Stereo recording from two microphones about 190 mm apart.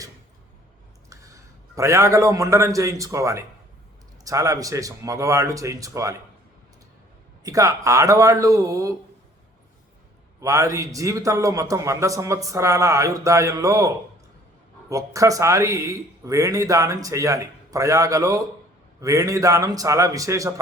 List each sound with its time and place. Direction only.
1.1 s a man's voice: 15° right (ahead or behind)
7.4 s a man's voice: 15° right (ahead or behind)
10.4 s a man's voice: 15° right (ahead or behind)